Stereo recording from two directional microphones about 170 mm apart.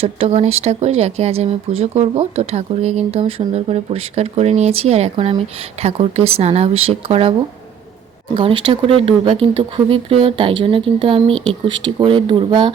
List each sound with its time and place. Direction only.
0.0 s speech: 35° right (ahead or behind)
8.4 s speech: 30° right (ahead or behind)